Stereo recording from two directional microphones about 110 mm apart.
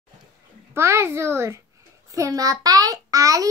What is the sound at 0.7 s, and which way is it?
A child's voice, 20° right (ahead or behind).